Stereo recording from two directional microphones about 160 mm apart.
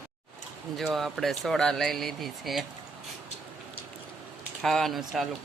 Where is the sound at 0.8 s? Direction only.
Centre (ahead or behind).